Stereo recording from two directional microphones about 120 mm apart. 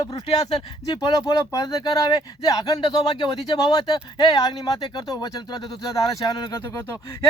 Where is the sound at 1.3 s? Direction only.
30° left (ahead or behind).